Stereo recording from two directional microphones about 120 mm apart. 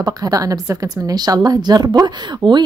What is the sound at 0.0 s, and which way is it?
A woman's voice, 30° right (ahead or behind).